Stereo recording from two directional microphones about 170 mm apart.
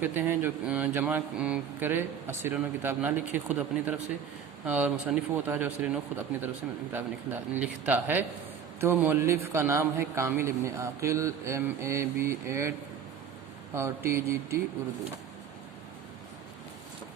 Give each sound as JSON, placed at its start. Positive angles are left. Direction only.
{"t": 0.0, "sound": "speech", "side_deg": -10}
{"t": 13.7, "sound": "speech", "side_deg": -15}